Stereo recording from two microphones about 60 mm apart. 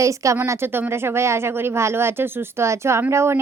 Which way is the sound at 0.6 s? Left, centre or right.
Right.